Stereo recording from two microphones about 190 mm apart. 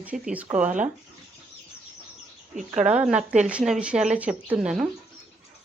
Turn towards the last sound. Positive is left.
turn(degrees=-5)  # may be behind; listen again after turning